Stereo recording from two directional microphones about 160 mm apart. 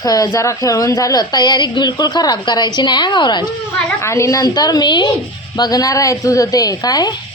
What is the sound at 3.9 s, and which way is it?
Speech, 15° left (ahead or behind).